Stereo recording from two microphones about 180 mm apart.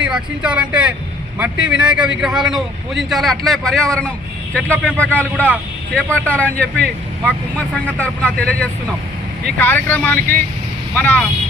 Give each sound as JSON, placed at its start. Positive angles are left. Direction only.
{"t": 0.0, "sound": "speech", "side_deg": -5}